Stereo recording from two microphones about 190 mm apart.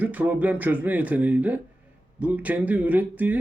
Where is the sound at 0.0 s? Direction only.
10° right (ahead or behind).